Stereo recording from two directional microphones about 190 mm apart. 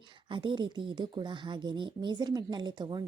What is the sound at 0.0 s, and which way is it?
Speech, 25° right (ahead or behind).